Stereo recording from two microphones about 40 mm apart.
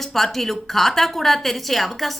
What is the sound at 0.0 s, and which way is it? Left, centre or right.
A woman's voice, centre.